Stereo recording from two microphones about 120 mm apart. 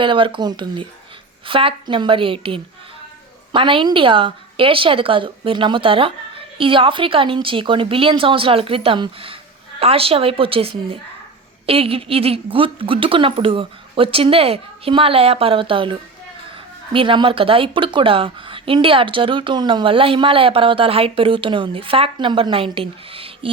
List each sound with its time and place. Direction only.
0.0 s speech: 45° right (ahead or behind)